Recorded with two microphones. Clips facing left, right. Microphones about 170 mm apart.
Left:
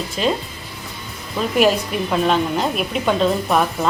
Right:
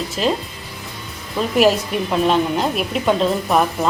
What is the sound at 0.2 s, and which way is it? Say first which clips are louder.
Speech: even; centre (ahead or behind).